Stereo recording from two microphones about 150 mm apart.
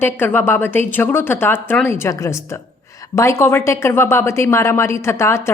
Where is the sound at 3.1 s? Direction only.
20° left (ahead or behind).